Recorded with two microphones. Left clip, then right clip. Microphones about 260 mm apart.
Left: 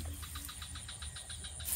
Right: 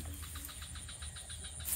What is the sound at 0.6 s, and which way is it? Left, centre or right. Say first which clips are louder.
Vehicle: left 2 dB; centre.